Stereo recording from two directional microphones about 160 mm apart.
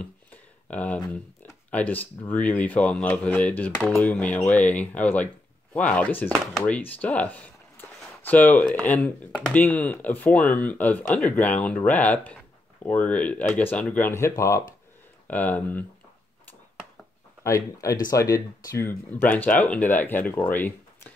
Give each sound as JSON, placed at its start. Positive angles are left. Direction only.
{"t": 0.0, "sound": "a sound", "side_deg": 10}
{"t": 1.1, "sound": "speech", "side_deg": 10}
{"t": 17.4, "sound": "speech", "side_deg": 20}